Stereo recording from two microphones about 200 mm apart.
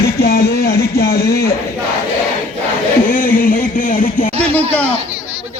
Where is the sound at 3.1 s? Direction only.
45° left (ahead or behind).